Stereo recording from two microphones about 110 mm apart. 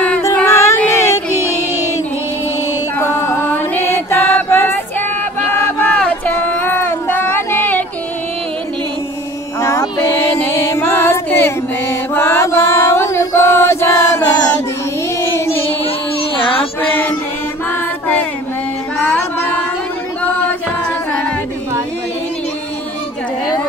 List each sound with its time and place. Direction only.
0.5 s cat: 25° left (ahead or behind)
3.0 s chant: 20° left (ahead or behind)
5.5 s a sound: 20° left (ahead or behind)
9.6 s music: 25° left (ahead or behind)
15.1 s child singing: 25° left (ahead or behind)
15.8 s child singing: 55° left (ahead or behind)
16.8 s a sound: 15° left (ahead or behind)
17.6 s music: 15° left (ahead or behind)